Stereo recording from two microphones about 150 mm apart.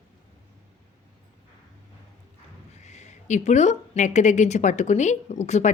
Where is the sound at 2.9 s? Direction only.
50° left (ahead or behind).